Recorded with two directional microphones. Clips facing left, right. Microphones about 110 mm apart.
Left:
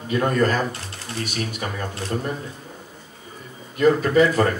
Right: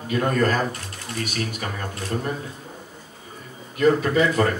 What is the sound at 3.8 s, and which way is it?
Speech, 35° left (ahead or behind).